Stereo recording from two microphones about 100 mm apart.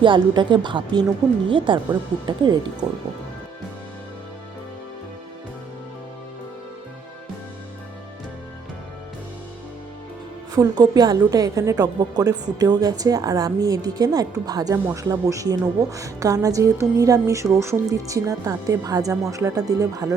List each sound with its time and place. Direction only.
0.0 s a woman's voice: 55° right (ahead or behind)
10.5 s a woman's voice: 40° right (ahead or behind)